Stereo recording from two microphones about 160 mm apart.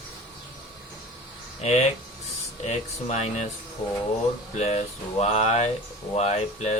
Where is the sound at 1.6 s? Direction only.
45° left (ahead or behind).